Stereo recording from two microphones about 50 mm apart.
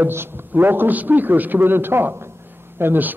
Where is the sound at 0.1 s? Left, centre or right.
Right.